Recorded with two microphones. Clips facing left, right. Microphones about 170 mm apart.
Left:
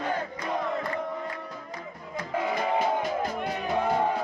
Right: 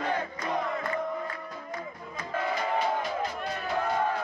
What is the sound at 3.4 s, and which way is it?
Music, 20° left (ahead or behind).